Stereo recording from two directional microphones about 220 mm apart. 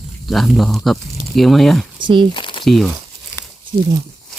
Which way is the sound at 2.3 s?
20° left (ahead or behind).